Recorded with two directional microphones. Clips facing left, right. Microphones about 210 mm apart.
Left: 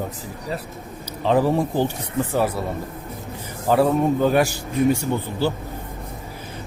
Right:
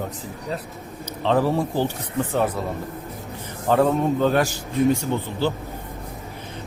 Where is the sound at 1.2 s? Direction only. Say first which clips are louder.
Left 2 dB; 15° left (ahead or behind).